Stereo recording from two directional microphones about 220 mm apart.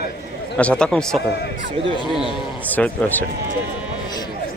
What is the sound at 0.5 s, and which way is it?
Speech, 5° left (ahead or behind).